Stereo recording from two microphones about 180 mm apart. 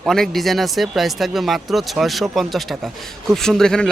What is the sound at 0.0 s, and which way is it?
Speech, centre (ahead or behind).